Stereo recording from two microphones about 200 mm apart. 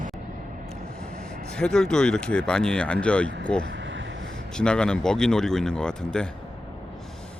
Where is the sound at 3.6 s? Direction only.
65° right (ahead or behind).